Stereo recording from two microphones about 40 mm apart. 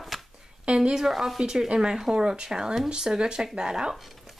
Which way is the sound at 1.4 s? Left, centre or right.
Centre.